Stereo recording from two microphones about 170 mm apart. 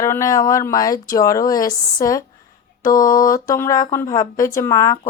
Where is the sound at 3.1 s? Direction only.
55° left (ahead or behind).